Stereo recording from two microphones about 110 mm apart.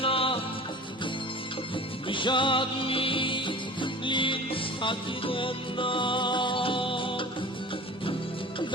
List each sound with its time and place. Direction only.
0.0 s music: 55° left (ahead or behind)
1.7 s music: 50° left (ahead or behind)